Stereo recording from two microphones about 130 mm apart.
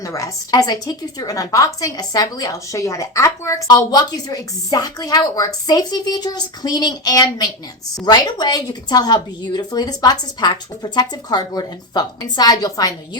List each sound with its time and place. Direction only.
0.0 s a woman's voice: 25° left (ahead or behind)